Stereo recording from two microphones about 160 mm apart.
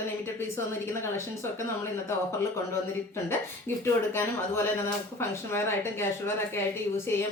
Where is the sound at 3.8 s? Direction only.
15° left (ahead or behind).